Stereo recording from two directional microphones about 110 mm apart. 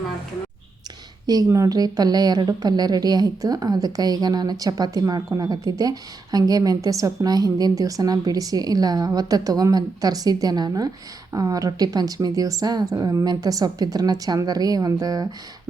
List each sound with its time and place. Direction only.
1.5 s a woman's voice: 30° right (ahead or behind)